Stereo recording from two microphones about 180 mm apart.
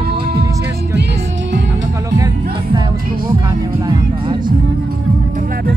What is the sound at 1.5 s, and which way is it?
Music, 90° right.